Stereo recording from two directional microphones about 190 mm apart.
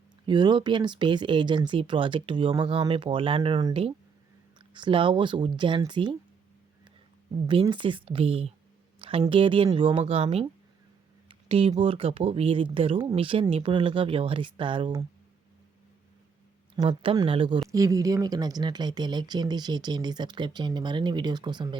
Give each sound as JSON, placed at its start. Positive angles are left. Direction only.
{"t": 0.3, "sound": "speech", "side_deg": -25}
{"t": 7.4, "sound": "speech", "side_deg": -25}
{"t": 16.7, "sound": "speech", "side_deg": -20}